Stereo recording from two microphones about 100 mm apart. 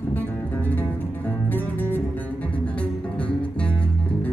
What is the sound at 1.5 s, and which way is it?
Music, 20° left (ahead or behind).